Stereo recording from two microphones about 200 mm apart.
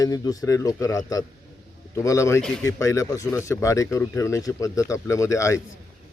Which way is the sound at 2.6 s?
15° left (ahead or behind).